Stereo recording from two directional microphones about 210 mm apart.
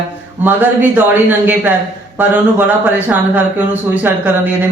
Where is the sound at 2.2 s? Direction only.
10° right (ahead or behind).